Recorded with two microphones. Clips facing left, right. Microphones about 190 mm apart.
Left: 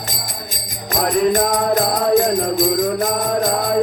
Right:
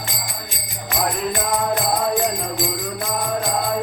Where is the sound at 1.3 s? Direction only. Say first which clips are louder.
Left 5 dB; 40° left (ahead or behind).